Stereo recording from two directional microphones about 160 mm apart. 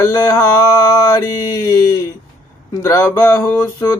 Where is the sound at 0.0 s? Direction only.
20° left (ahead or behind).